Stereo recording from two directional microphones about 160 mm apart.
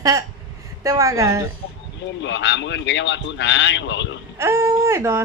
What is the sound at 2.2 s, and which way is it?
A man's voice, 90° left.